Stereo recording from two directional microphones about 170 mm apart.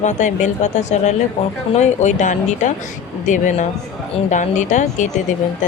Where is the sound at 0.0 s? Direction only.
45° left (ahead or behind).